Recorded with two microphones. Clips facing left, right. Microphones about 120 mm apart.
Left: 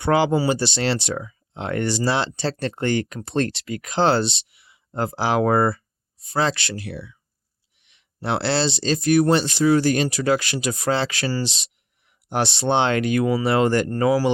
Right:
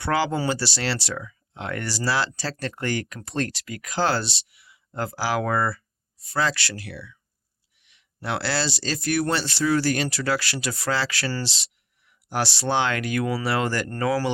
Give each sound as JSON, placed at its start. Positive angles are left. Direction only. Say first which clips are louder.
{"t": 0.0, "sound": "speech", "louder": "left 5 dB", "side_deg": 20}